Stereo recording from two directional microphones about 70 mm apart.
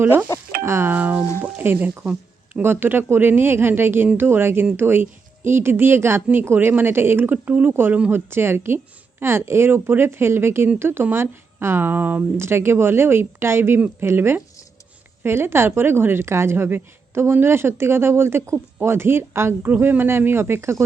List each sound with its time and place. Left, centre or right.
0.0 s a woman's voice: right